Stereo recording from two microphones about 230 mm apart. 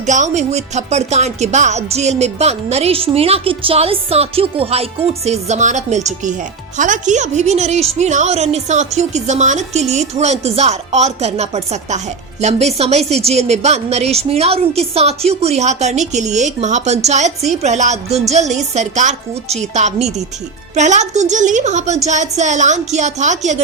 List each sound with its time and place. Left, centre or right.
0.0 s a woman's voice: right